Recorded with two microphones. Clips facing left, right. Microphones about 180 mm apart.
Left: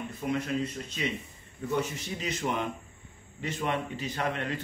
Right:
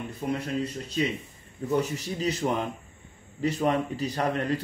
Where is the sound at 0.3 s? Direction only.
35° right (ahead or behind).